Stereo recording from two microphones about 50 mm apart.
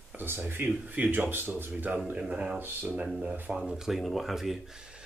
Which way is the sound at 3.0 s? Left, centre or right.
Centre.